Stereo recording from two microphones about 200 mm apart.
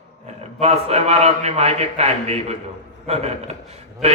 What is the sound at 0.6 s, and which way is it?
A man's voice, 30° right (ahead or behind).